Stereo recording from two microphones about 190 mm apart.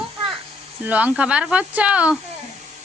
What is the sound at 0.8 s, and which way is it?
Speech, 10° right (ahead or behind).